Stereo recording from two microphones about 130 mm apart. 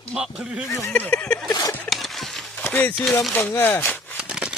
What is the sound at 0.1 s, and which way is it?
Speech, 5° right (ahead or behind).